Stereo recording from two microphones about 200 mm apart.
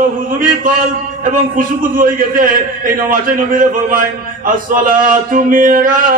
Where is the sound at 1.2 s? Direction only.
45° right (ahead or behind).